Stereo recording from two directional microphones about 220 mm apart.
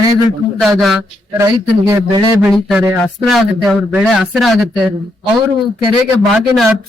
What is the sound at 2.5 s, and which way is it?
Speech, centre (ahead or behind).